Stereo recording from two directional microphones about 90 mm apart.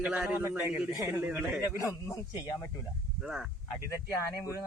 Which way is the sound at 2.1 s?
40° left (ahead or behind).